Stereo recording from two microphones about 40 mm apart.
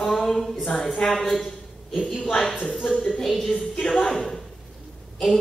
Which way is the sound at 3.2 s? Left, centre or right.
Centre.